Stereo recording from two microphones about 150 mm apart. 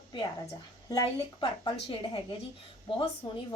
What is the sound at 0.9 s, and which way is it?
A woman's voice, 25° left (ahead or behind).